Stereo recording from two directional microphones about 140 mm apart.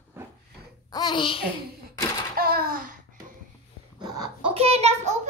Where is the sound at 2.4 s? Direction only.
90° right.